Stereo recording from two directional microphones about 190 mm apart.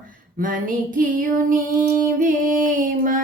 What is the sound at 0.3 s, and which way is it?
Music, 45° right (ahead or behind).